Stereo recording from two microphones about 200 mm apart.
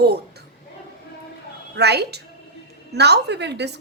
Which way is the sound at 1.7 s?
55° right (ahead or behind).